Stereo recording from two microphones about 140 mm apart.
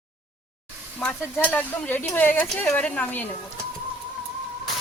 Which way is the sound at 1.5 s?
15° left (ahead or behind).